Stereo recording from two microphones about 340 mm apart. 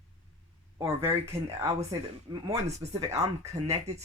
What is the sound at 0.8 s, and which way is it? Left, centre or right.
Speech, centre.